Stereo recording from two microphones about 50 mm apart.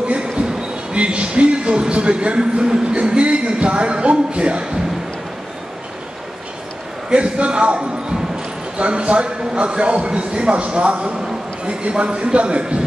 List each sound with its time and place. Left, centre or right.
0.9 s a man's voice: right
7.1 s a man's voice: right